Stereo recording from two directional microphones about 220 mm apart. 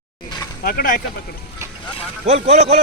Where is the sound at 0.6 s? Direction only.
40° left (ahead or behind).